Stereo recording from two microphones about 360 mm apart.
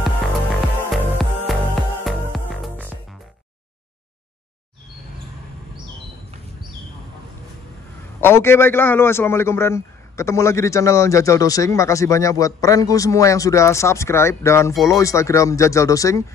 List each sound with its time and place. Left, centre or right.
0.0 s music: centre
8.2 s a man's voice: centre